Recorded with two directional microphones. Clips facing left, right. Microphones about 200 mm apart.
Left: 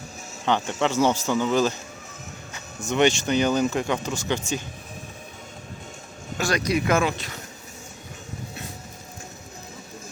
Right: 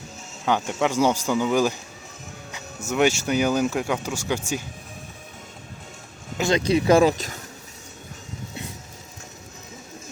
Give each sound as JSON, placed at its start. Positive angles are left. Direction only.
{"t": 0.4, "sound": "speech", "side_deg": -10}
{"t": 2.8, "sound": "speech", "side_deg": -5}
{"t": 6.3, "sound": "speech", "side_deg": -20}